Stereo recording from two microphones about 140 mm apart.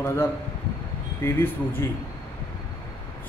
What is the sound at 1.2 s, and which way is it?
Speech, 15° left (ahead or behind).